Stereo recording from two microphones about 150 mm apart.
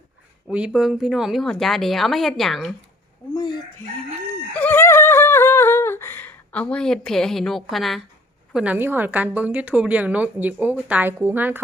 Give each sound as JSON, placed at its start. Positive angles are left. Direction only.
{"t": 0.4, "sound": "a woman's voice", "side_deg": -5}
{"t": 3.3, "sound": "speech", "side_deg": 25}
{"t": 4.5, "sound": "a sound", "side_deg": 10}
{"t": 8.5, "sound": "a woman's voice", "side_deg": -10}